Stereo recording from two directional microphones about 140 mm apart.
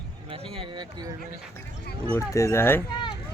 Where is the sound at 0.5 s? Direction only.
35° right (ahead or behind).